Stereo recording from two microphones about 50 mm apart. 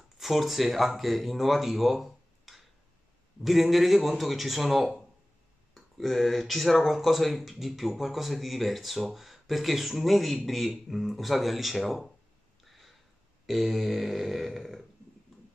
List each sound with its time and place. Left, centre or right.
0.2 s a man's voice: centre
12.6 s a sound: centre
13.5 s a man's voice: centre